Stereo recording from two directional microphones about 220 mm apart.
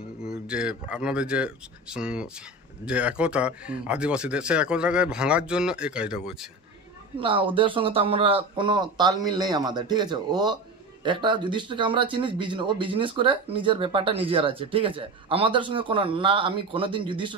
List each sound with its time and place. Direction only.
0.2 s speech: 5° right (ahead or behind)
7.2 s speech: 25° right (ahead or behind)